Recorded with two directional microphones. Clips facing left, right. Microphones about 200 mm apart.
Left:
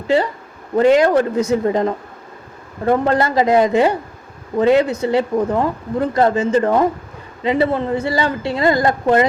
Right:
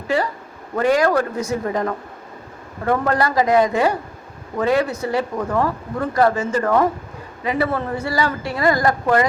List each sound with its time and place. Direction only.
0.8 s speech: 25° left (ahead or behind)